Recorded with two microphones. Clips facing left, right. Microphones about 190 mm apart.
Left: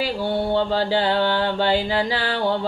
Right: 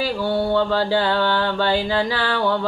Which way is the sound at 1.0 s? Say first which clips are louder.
Even; 20° left (ahead or behind).